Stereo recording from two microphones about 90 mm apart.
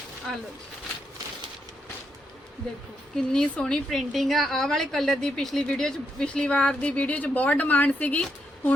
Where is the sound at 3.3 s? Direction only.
10° left (ahead or behind).